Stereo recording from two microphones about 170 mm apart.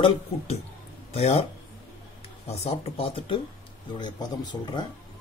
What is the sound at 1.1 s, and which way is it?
Speech, 35° left (ahead or behind).